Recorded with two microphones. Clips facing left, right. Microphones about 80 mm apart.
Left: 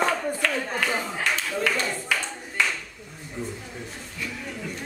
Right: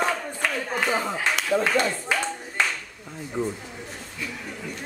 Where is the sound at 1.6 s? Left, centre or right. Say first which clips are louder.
Right 3 dB; right.